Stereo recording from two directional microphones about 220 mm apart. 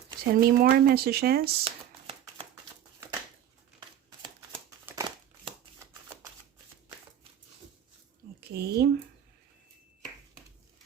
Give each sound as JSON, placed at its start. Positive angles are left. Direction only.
{"t": 0.3, "sound": "speech", "side_deg": -40}
{"t": 1.6, "sound": "shuffling cards", "side_deg": -25}
{"t": 4.9, "sound": "crumpling", "side_deg": -20}
{"t": 8.4, "sound": "a sound", "side_deg": -50}